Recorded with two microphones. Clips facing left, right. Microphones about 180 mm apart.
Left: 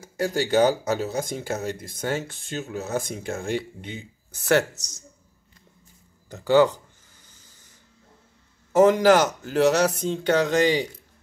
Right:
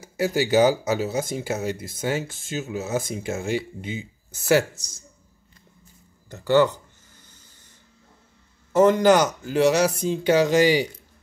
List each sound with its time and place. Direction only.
0.0 s speech: 5° right (ahead or behind)
4.7 s speech: 20° left (ahead or behind)
8.7 s speech: 10° left (ahead or behind); by 10.9 s 10° right (ahead or behind)